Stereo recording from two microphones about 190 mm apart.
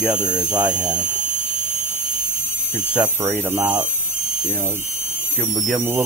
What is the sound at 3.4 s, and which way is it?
Speech, 15° right (ahead or behind).